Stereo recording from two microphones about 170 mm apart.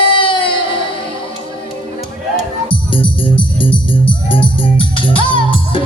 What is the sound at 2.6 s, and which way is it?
Music, 30° left (ahead or behind).